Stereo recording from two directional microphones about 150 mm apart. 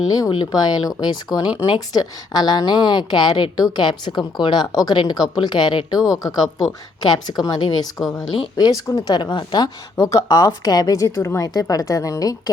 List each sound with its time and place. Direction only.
0.1 s a woman's voice: 30° left (ahead or behind)
7.1 s a woman's voice: 25° left (ahead or behind)